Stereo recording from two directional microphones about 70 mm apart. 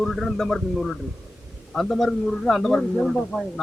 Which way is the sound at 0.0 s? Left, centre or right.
Centre.